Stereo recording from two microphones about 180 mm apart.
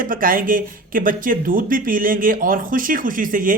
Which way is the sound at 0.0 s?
50° right (ahead or behind).